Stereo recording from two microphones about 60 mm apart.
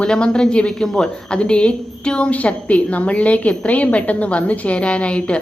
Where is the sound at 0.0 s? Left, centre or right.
Centre.